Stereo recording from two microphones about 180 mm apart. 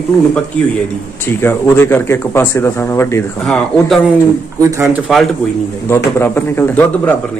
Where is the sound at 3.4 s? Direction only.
5° left (ahead or behind).